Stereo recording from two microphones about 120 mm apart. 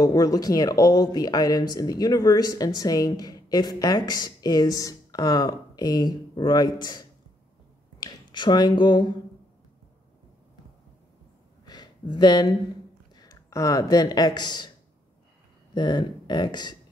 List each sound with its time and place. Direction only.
0.0 s speech: 30° left (ahead or behind)
11.6 s a sound: 35° left (ahead or behind)
13.1 s speech: 30° left (ahead or behind)
15.7 s speech: 35° left (ahead or behind)